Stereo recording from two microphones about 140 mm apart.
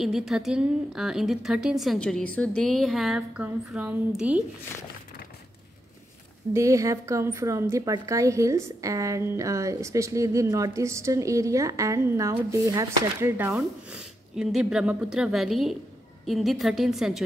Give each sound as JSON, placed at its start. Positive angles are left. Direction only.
{"t": 0.0, "sound": "a woman's voice", "side_deg": -5}
{"t": 6.5, "sound": "a woman's voice", "side_deg": -20}
{"t": 13.6, "sound": "a woman's voice", "side_deg": -5}